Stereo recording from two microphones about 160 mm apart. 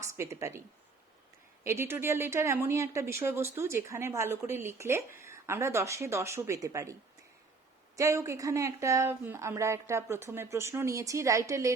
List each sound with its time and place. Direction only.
0.0 s speech: 15° right (ahead or behind)
1.6 s speech: 15° right (ahead or behind)
7.9 s speech: 20° right (ahead or behind)